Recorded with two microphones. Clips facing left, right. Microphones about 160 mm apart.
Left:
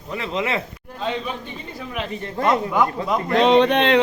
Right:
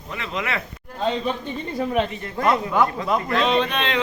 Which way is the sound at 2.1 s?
35° left (ahead or behind).